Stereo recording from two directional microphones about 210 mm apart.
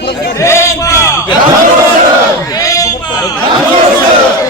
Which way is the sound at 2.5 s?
15° left (ahead or behind).